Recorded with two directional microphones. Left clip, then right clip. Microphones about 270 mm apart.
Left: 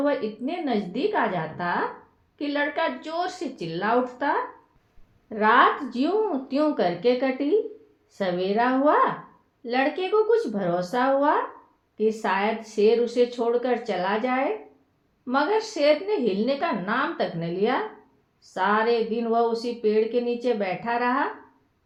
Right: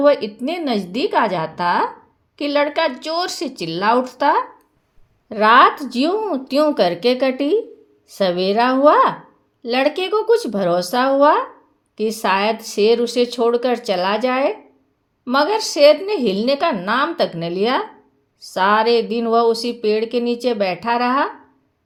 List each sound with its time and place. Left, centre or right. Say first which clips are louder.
0.0 s speech: right 10 dB; right